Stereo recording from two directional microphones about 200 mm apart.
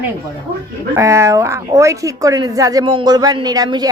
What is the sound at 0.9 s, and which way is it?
Speech, 15° right (ahead or behind).